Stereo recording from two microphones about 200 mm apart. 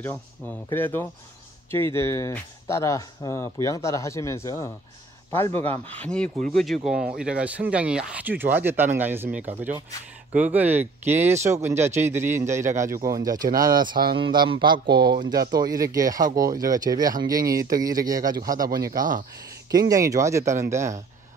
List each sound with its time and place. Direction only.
0.0 s speech: 10° left (ahead or behind); by 12.9 s 15° right (ahead or behind)
12.9 s speech: 45° right (ahead or behind)
13.2 s speech: 20° right (ahead or behind)
18.9 s speech: 40° right (ahead or behind)
19.7 s speech: 20° right (ahead or behind)